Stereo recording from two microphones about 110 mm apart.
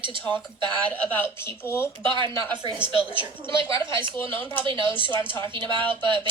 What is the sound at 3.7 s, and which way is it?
Speech, 30° left (ahead or behind).